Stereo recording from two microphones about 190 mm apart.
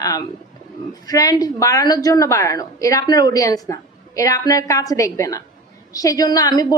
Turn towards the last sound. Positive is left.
turn(degrees=20)  # may be behind; listen again after turning